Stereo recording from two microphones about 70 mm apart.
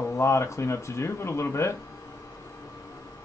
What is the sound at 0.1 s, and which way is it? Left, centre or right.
Speech, left.